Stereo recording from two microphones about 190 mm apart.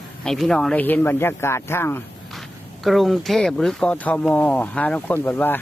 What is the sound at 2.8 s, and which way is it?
Speech, centre (ahead or behind).